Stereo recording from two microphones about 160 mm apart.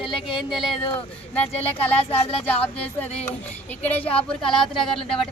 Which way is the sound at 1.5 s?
40° left (ahead or behind).